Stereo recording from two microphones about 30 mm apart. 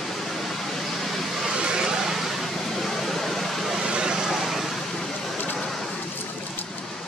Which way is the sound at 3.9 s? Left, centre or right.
Right.